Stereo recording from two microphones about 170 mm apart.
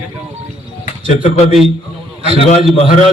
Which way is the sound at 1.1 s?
40° left (ahead or behind).